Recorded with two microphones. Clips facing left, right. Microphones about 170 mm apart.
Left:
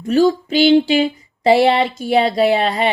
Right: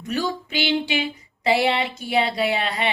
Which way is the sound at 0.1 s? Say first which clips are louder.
Left 12 dB; 35° left (ahead or behind).